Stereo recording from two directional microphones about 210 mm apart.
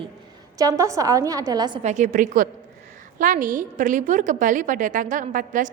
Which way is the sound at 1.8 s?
35° right (ahead or behind).